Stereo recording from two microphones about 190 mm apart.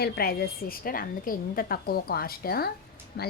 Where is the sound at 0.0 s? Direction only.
55° left (ahead or behind).